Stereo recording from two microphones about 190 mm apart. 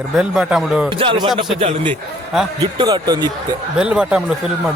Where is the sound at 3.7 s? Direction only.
5° right (ahead or behind).